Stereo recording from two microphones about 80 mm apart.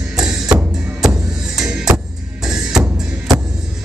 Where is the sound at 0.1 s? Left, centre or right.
Centre.